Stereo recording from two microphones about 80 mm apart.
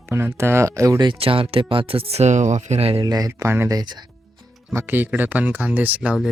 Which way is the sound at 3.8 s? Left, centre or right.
Right.